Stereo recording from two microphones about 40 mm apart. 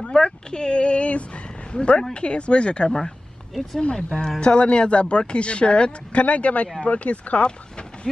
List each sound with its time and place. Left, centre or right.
0.1 s a sound: left
2.1 s speech: left
3.9 s speech: centre